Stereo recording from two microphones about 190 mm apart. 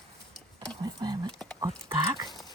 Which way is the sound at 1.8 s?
15° right (ahead or behind).